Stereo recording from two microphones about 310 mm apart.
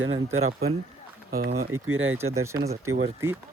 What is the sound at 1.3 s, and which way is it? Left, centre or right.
Speech, right.